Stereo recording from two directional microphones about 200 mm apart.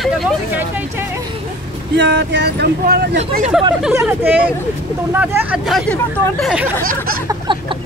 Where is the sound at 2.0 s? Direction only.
60° right (ahead or behind).